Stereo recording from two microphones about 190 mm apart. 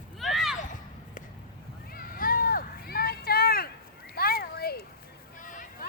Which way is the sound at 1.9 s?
50° left (ahead or behind).